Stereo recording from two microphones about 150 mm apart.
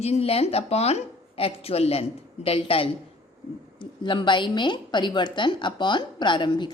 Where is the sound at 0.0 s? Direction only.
40° left (ahead or behind).